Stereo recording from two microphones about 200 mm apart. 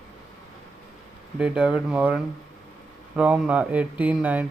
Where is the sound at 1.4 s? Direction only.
5° right (ahead or behind).